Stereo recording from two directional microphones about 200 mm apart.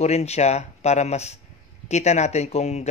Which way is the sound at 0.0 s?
30° left (ahead or behind).